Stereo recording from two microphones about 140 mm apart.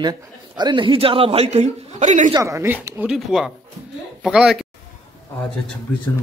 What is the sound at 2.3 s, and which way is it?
Speech, 20° right (ahead or behind).